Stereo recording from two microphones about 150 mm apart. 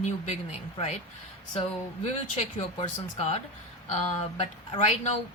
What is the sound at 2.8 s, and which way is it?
Speech, 40° left (ahead or behind).